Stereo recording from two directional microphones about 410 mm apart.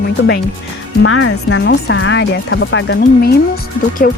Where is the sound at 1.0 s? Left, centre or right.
Left.